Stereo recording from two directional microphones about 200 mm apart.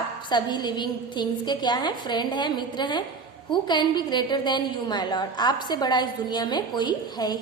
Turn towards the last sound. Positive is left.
turn(degrees=20)  # may be behind; listen again after turning